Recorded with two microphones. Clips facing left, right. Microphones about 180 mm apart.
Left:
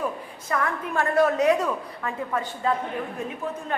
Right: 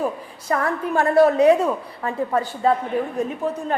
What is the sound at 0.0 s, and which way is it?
A woman's voice, 35° right (ahead or behind).